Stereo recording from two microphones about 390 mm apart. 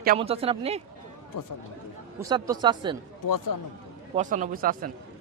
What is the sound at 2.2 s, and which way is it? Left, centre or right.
Speech, centre.